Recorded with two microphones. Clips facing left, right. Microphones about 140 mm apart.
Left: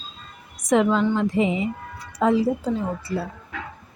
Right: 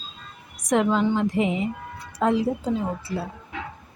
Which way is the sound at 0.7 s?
5° right (ahead or behind).